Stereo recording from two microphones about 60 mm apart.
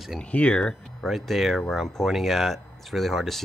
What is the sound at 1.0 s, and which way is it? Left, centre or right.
Speech, centre.